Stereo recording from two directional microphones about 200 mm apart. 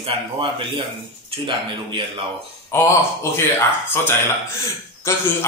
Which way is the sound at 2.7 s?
15° left (ahead or behind).